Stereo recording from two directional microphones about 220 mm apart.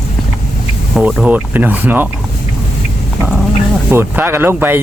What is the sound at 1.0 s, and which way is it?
Speech, 5° right (ahead or behind).